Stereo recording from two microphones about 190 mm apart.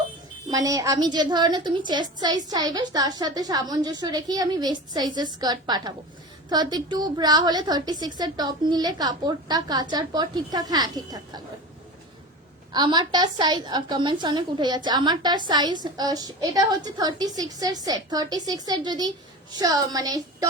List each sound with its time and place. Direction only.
0.5 s a woman's voice: 20° right (ahead or behind)
12.7 s a woman's voice: 20° right (ahead or behind)